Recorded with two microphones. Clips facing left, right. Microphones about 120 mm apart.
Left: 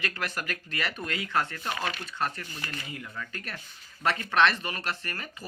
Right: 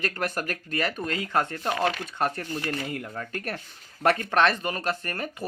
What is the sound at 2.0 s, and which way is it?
Speech, 50° right (ahead or behind).